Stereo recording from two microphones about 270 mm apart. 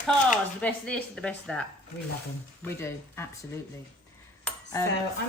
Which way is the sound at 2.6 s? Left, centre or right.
Centre.